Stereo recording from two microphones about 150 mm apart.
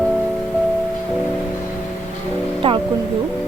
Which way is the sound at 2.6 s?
35° right (ahead or behind).